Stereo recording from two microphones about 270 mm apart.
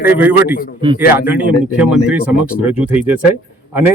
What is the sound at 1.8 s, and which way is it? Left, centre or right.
Speech, centre.